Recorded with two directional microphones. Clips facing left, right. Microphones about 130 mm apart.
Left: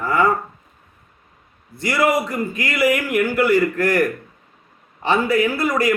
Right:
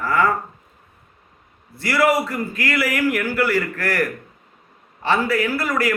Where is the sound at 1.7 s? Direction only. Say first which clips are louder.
Even; 20° left (ahead or behind).